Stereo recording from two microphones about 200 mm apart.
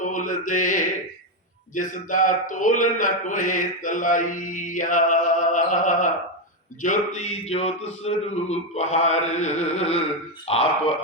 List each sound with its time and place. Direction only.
0.0 s mantra: 40° left (ahead or behind)
1.7 s a man's voice: 40° left (ahead or behind)